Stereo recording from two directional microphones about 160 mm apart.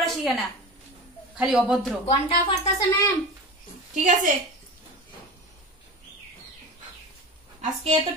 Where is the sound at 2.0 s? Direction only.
40° left (ahead or behind).